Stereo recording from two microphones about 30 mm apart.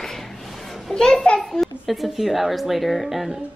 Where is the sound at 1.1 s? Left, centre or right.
Left.